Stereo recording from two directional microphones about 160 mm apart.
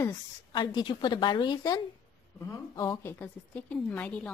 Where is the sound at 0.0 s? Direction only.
25° left (ahead or behind).